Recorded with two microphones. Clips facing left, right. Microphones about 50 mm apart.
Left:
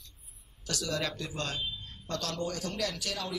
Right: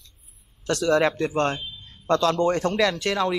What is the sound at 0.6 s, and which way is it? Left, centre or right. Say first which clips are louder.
A man's voice: right 13 dB; right.